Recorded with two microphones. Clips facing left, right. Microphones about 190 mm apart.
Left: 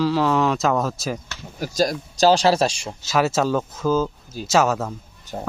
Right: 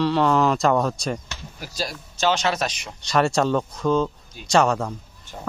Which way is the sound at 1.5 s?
45° left (ahead or behind).